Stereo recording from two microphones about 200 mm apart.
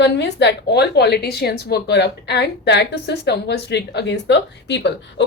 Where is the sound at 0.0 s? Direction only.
60° left (ahead or behind).